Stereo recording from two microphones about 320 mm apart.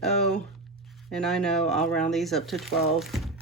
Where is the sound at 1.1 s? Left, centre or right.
Centre.